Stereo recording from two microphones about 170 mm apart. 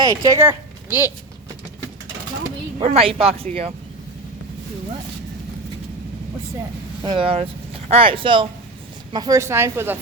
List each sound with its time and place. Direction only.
0.0 s a woman's voice: 20° right (ahead or behind)
2.7 s speech: 30° right (ahead or behind)
7.0 s speech: 30° right (ahead or behind); by 10.0 s 15° right (ahead or behind)